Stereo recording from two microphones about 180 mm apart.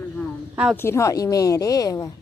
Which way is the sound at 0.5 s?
5° right (ahead or behind).